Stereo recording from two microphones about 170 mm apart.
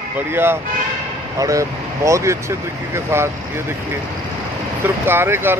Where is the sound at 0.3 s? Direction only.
15° right (ahead or behind).